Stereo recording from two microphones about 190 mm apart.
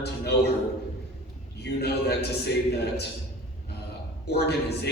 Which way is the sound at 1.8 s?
60° left (ahead or behind).